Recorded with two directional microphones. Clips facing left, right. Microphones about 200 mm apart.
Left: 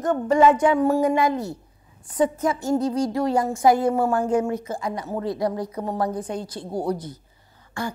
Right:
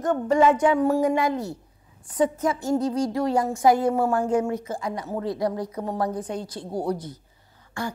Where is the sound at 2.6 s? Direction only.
35° left (ahead or behind).